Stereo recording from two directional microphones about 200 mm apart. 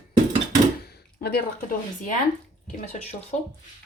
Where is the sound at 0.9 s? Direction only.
55° left (ahead or behind).